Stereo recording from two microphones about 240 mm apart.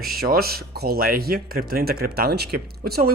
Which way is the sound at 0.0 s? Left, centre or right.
Right.